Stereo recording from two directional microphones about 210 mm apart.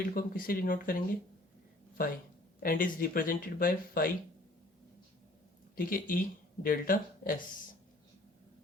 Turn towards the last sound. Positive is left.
turn(degrees=40)  # may be behind; listen again after turning